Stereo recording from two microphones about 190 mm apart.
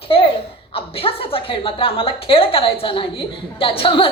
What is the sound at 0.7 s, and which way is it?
A woman's voice, 30° left (ahead or behind).